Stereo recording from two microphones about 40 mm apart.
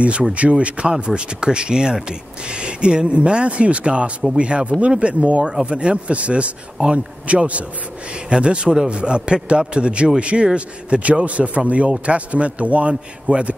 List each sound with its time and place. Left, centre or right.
0.3 s a man's voice: right